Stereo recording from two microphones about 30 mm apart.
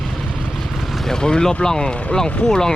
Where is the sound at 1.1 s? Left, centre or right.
Left.